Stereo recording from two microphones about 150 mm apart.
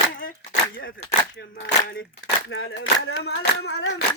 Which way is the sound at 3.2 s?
90° left.